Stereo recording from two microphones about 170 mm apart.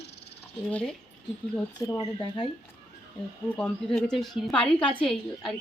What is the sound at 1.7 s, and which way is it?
Speech, 25° left (ahead or behind).